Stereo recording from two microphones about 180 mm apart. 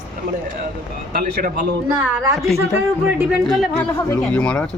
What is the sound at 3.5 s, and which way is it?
Speech, centre (ahead or behind).